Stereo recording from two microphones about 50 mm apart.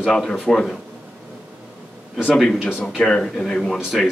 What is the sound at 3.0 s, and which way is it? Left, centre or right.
Speech, centre.